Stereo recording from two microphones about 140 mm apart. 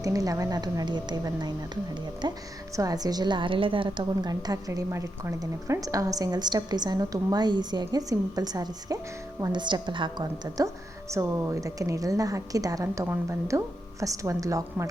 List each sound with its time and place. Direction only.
0.0 s a woman's voice: 25° right (ahead or behind)
11.1 s a woman's voice: 20° right (ahead or behind)